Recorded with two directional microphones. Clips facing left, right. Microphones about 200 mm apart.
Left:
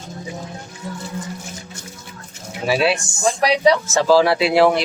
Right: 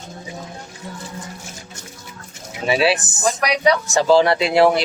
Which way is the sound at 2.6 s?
Centre (ahead or behind).